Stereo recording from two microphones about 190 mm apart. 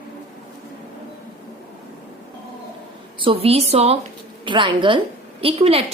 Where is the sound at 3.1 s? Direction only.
25° right (ahead or behind).